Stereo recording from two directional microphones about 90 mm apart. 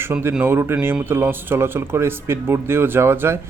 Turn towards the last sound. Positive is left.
turn(degrees=-25)  # may be behind; listen again after turning